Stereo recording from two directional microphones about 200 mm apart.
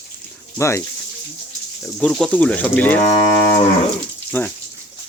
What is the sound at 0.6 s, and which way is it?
Speech, 15° left (ahead or behind).